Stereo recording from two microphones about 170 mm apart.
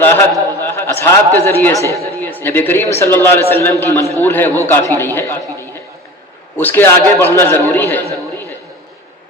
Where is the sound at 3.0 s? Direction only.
15° left (ahead or behind).